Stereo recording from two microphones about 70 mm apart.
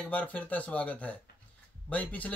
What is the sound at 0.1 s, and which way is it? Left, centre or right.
Speech, left.